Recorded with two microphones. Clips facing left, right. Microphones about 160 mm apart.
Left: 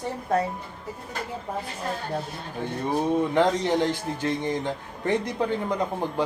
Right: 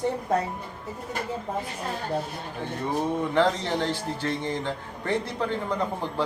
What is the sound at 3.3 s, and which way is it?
Speech, 15° left (ahead or behind).